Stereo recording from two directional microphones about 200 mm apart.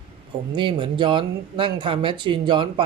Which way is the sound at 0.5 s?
25° right (ahead or behind).